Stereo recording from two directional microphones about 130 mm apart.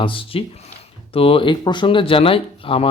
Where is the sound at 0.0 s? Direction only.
40° left (ahead or behind).